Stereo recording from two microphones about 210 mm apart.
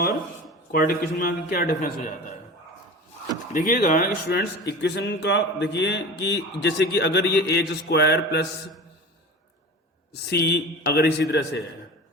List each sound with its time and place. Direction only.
0.7 s a man's voice: 45° left (ahead or behind)
3.5 s a man's voice: 40° left (ahead or behind)
10.1 s a man's voice: 50° left (ahead or behind)